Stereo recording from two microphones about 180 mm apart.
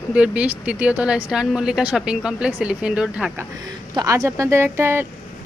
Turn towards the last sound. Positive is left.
turn(degrees=-15)  # may be behind; listen again after turning